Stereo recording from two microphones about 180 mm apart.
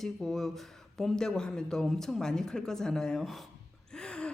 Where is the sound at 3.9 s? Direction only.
5° left (ahead or behind).